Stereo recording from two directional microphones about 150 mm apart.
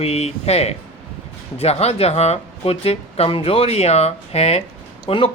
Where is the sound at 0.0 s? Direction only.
45° left (ahead or behind).